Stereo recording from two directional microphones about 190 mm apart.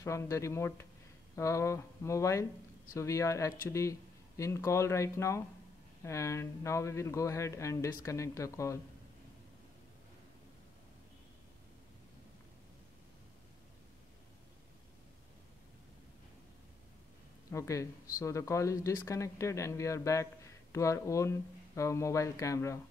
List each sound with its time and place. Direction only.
0.0 s speech: 15° left (ahead or behind)
17.5 s speech: 15° left (ahead or behind)